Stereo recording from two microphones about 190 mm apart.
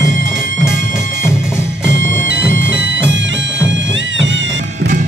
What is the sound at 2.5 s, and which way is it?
Music, 75° right (ahead or behind).